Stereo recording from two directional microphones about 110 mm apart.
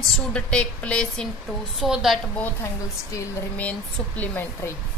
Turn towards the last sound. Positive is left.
turn(degrees=15)  # may be behind; listen again after turning